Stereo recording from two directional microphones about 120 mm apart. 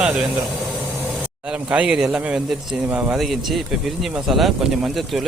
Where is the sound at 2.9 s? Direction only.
20° right (ahead or behind).